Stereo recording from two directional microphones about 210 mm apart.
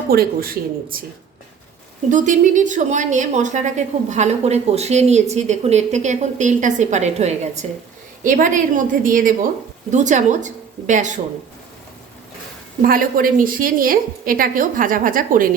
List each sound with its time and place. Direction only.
0.1 s speech: 45° right (ahead or behind)
2.0 s a woman's voice: 35° right (ahead or behind)
12.8 s a woman's voice: 40° right (ahead or behind)